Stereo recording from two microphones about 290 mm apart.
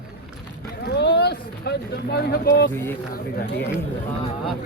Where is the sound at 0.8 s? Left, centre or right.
Left.